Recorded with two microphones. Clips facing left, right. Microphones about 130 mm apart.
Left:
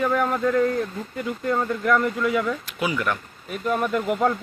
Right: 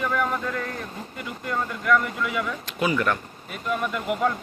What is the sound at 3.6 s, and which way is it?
Speech, 40° left (ahead or behind).